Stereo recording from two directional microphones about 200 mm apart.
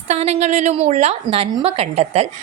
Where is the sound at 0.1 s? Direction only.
35° right (ahead or behind).